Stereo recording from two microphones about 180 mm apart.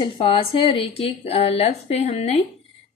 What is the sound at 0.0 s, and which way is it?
Speech, 30° left (ahead or behind).